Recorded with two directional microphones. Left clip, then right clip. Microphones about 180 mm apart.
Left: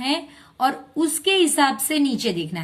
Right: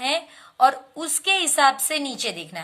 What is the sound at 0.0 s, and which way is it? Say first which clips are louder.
A woman's voice: even; 25° right (ahead or behind).